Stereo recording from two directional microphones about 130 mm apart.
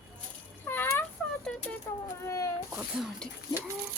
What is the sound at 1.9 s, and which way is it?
Speech, 20° left (ahead or behind).